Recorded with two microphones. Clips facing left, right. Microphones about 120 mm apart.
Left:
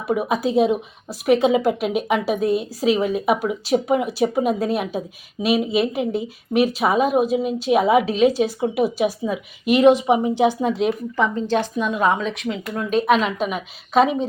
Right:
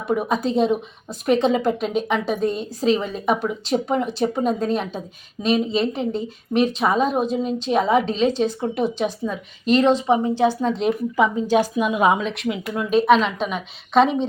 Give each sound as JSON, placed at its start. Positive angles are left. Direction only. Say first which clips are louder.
{"t": 0.1, "sound": "speech", "louder": "left 1 dB", "side_deg": 5}
{"t": 11.3, "sound": "a woman's voice", "louder": "right 2 dB", "side_deg": -10}
{"t": 12.2, "sound": "a woman's voice", "louder": "even", "side_deg": 0}